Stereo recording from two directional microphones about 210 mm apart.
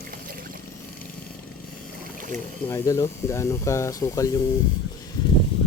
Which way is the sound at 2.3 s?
10° left (ahead or behind).